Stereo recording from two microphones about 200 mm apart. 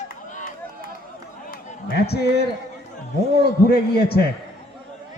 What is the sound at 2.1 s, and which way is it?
Speech, 55° left (ahead or behind).